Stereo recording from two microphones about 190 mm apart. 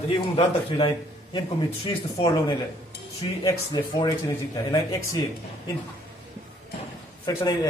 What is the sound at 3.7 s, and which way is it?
A man's voice, 20° left (ahead or behind).